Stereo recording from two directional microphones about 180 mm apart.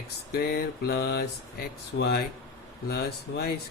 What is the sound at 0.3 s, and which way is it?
Speech, 55° left (ahead or behind).